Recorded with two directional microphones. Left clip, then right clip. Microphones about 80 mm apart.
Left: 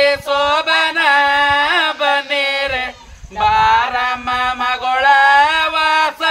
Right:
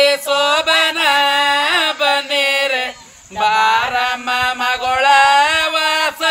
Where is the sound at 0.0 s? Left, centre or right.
Right.